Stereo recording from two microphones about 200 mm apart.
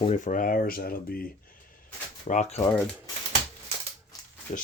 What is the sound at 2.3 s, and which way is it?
Speech, 35° left (ahead or behind).